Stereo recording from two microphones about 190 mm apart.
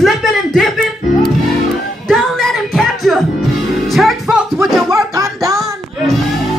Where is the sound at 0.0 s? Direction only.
Centre (ahead or behind).